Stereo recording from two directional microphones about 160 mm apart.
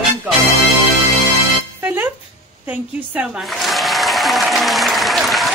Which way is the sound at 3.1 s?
Centre (ahead or behind).